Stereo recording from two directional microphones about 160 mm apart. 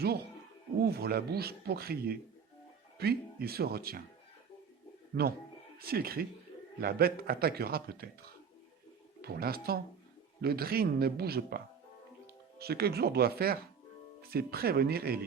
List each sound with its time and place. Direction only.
0.8 s speech: 75° right (ahead or behind)
5.8 s speech: 70° right (ahead or behind)
9.2 s speech: 75° right (ahead or behind)